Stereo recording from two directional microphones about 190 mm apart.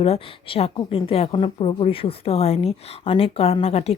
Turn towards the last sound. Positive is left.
turn(degrees=35)  # may be behind; listen again after turning